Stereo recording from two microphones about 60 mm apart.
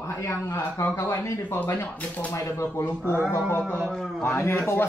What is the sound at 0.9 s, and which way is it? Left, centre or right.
Speech, left.